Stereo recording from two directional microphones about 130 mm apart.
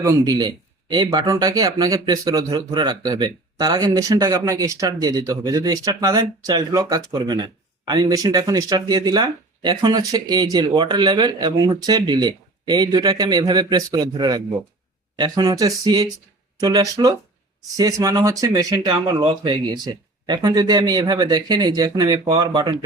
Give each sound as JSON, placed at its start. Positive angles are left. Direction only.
{"t": 0.0, "sound": "speech", "side_deg": -25}